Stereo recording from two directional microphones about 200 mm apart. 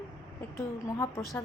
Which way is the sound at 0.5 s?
15° left (ahead or behind).